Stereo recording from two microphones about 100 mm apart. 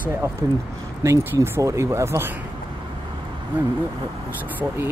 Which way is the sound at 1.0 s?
25° right (ahead or behind).